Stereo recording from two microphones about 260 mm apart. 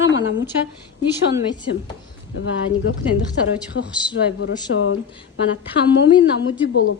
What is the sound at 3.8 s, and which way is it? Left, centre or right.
Speech, left.